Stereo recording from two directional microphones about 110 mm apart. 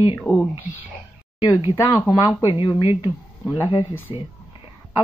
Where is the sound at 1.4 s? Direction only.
35° left (ahead or behind).